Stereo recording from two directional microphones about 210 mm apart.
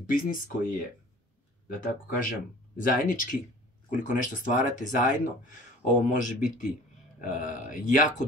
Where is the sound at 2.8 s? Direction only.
40° left (ahead or behind).